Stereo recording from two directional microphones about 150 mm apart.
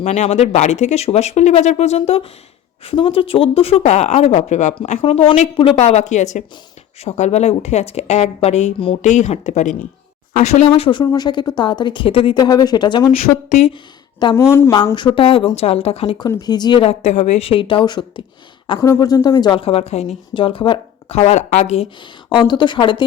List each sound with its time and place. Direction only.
0.0 s speech: 45° left (ahead or behind)
5.0 s speech: 40° left (ahead or behind)
10.7 s speech: 35° left (ahead or behind)
13.5 s speech: 50° left (ahead or behind)
14.3 s speech: 20° left (ahead or behind)
14.9 s speech: 35° left (ahead or behind)
16.2 s speech: 25° left (ahead or behind); by 21.8 s 45° left (ahead or behind)
22.3 s speech: 30° left (ahead or behind)